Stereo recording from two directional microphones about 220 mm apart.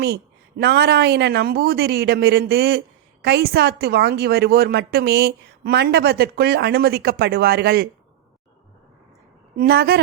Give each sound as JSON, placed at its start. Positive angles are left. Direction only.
{"t": 0.0, "sound": "a woman's voice", "side_deg": -45}
{"t": 9.6, "sound": "a woman's voice", "side_deg": -45}